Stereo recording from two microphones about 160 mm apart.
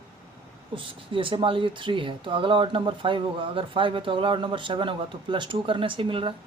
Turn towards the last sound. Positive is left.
turn(degrees=-35)  # may be behind; listen again after turning